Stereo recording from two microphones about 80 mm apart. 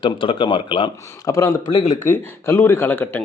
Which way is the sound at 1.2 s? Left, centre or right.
Left.